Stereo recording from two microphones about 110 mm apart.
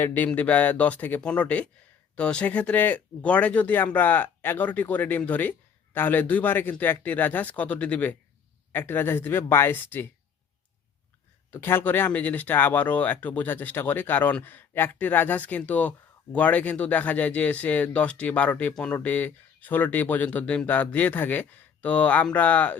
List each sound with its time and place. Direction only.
0.0 s speech: 20° left (ahead or behind)
11.5 s speech: 20° left (ahead or behind)